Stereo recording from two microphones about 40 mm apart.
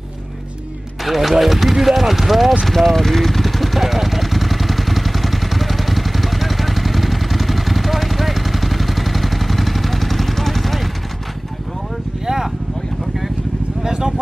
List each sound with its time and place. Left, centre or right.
1.0 s speech: centre
2.6 s vehicle: centre
13.8 s a sound: centre